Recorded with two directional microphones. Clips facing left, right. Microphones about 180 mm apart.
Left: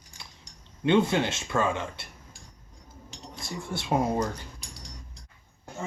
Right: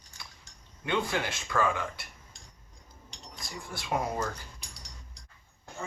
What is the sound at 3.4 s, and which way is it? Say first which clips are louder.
Speech: left 6 dB; 25° left (ahead or behind).